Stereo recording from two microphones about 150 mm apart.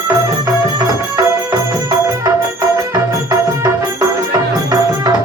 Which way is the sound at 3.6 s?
25° right (ahead or behind).